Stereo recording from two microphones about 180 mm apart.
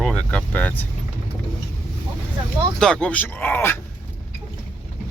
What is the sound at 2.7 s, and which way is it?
Speech, 5° left (ahead or behind).